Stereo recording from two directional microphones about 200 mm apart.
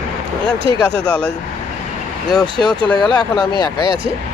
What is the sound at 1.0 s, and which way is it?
Speech, 5° left (ahead or behind).